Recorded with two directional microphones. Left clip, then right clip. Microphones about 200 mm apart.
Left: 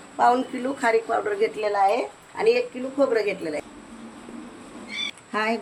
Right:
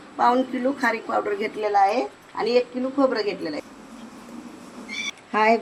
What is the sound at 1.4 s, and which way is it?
Speech, 10° left (ahead or behind).